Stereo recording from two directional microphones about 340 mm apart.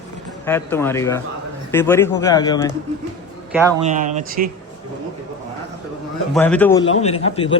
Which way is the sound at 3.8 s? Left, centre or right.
Right.